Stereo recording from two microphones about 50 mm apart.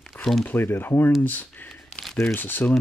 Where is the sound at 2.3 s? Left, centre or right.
Left.